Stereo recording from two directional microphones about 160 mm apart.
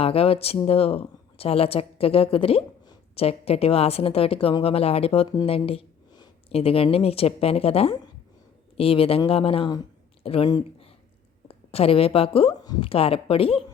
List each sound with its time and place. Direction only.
0.0 s speech: 35° left (ahead or behind)